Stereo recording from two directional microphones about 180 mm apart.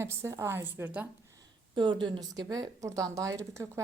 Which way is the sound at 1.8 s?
25° right (ahead or behind).